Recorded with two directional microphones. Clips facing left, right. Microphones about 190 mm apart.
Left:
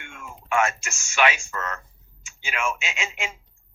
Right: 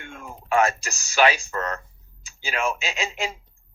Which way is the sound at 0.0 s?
35° right (ahead or behind).